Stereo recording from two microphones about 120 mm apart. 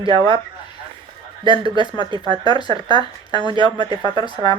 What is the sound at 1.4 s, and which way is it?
Speech, 40° right (ahead or behind).